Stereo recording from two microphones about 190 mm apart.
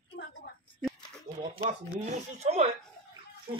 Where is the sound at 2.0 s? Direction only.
35° right (ahead or behind).